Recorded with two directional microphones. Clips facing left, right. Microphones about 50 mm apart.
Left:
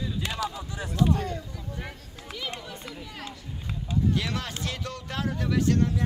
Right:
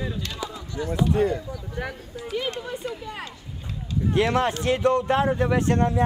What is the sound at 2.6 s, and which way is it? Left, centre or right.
Speech, right.